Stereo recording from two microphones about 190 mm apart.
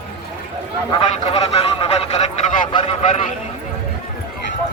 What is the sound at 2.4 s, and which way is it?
Vehicle, 35° left (ahead or behind).